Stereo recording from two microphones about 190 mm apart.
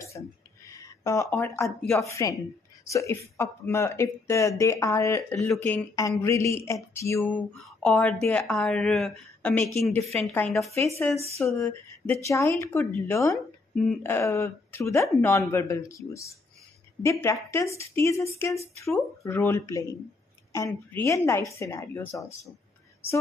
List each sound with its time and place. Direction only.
0.2 s speech: 15° left (ahead or behind)
5.3 s speech: 5° left (ahead or behind)
5.9 s a woman's voice: 15° left (ahead or behind)